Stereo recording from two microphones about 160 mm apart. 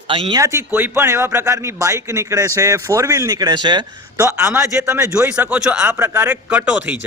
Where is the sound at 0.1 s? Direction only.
30° right (ahead or behind).